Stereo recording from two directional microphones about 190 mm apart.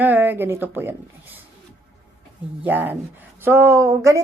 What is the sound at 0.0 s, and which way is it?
A woman's voice, 10° right (ahead or behind).